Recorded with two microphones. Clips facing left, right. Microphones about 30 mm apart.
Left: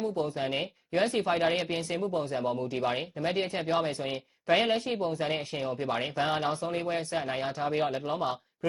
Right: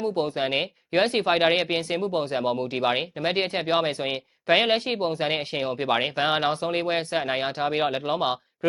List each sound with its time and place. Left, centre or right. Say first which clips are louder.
0.0 s speech: right 5 dB; right
2.1 s speech: right 5 dB; right